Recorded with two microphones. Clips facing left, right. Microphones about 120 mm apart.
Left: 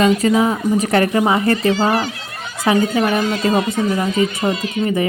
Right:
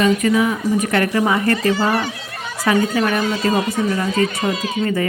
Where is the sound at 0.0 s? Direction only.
30° left (ahead or behind).